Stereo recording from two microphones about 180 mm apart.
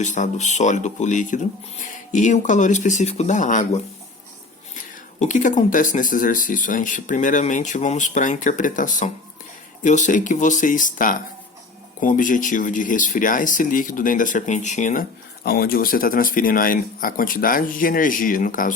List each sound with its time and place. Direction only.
0.0 s speech: 40° left (ahead or behind)
5.2 s speech: 45° left (ahead or behind)
15.4 s speech: 55° left (ahead or behind)